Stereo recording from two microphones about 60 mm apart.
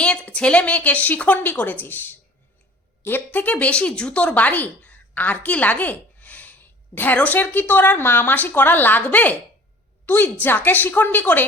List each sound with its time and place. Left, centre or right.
0.0 s a sound: centre
0.3 s a woman's voice: centre; by 3.2 s left
3.3 s a woman's voice: left